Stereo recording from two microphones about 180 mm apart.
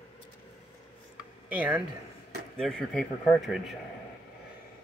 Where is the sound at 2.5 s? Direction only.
5° left (ahead or behind).